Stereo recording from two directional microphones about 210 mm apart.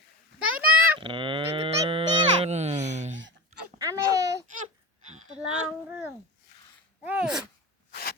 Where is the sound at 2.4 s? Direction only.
30° right (ahead or behind).